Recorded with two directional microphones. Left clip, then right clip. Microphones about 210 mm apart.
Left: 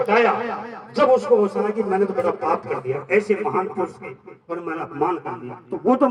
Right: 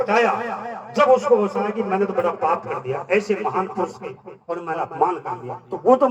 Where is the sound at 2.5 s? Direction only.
45° left (ahead or behind).